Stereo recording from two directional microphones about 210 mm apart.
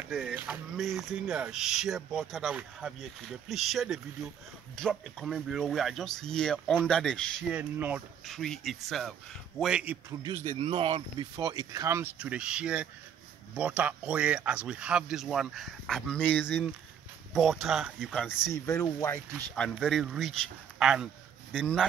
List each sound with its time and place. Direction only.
0.1 s speech: 5° right (ahead or behind)
10.6 s speech: 25° right (ahead or behind); by 18.5 s centre (ahead or behind)
18.5 s speech: 15° left (ahead or behind)
19.5 s speech: 5° left (ahead or behind)